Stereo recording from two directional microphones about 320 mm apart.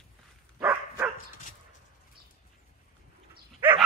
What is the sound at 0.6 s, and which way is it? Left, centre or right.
Dog, centre.